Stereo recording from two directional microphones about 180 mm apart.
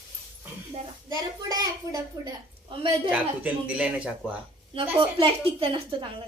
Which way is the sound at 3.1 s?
5° right (ahead or behind).